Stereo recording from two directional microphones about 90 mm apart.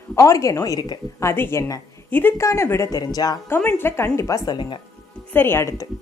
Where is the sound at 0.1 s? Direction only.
35° left (ahead or behind).